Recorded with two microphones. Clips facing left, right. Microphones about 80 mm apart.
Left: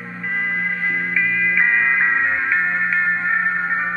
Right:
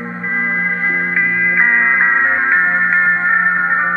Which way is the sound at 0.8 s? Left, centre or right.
Right.